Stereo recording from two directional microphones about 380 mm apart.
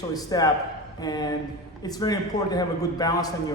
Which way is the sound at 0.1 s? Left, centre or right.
Centre.